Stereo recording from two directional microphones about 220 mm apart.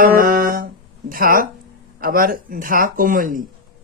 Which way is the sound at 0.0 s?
40° right (ahead or behind).